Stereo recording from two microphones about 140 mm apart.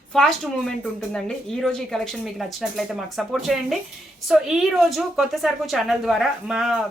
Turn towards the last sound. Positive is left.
turn(degrees=-5)  # may be behind; listen again after turning